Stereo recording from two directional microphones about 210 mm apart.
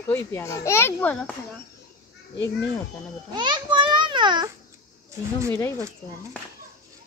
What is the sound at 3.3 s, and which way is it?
A child's voice, 20° right (ahead or behind).